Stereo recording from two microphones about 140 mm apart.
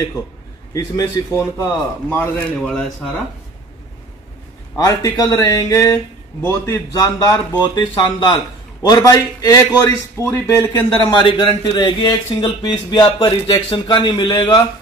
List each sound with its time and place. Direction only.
0.7 s speech: 25° left (ahead or behind)
2.0 s a man's voice: 15° left (ahead or behind)
4.7 s a man's voice: 25° left (ahead or behind)
11.0 s a man's voice: 35° left (ahead or behind)
14.3 s speech: 20° left (ahead or behind)